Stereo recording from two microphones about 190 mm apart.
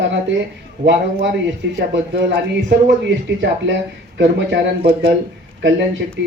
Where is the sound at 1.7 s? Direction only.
70° right (ahead or behind).